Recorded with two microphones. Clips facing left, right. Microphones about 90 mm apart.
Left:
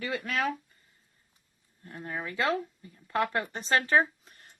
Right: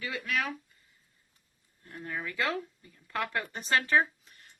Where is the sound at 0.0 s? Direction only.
35° left (ahead or behind).